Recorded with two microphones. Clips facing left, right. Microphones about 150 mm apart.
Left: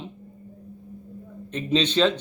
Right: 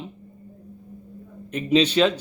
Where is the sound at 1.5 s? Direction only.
10° right (ahead or behind).